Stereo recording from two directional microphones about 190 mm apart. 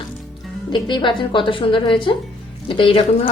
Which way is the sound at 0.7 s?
25° left (ahead or behind).